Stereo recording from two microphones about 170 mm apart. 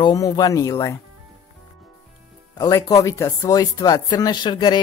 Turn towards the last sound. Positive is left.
turn(degrees=25)  # may be behind; listen again after turning